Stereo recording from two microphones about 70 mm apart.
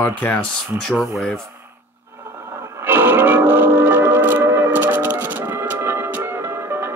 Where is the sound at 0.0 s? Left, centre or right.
Left.